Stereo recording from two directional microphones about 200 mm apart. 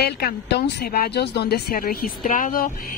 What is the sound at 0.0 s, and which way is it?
Speech, 55° left (ahead or behind).